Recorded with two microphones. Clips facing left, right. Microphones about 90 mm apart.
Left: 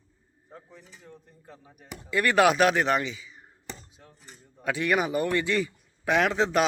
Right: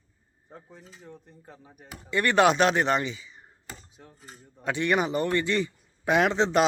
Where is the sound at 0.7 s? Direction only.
25° right (ahead or behind).